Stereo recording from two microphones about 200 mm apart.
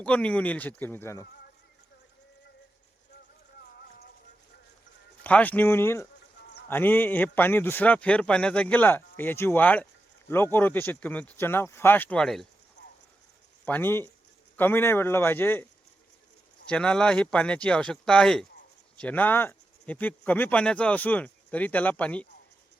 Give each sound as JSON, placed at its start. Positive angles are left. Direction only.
{"t": 0.0, "sound": "speech", "side_deg": 5}
{"t": 3.8, "sound": "clip-clop", "side_deg": 50}
{"t": 5.2, "sound": "speech", "side_deg": 10}
{"t": 13.7, "sound": "speech", "side_deg": 10}
{"t": 16.6, "sound": "speech", "side_deg": 5}